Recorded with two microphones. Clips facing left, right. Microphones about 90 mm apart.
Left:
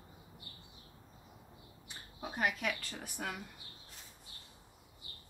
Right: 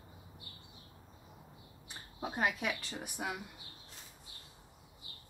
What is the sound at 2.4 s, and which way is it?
Speech, 30° right (ahead or behind).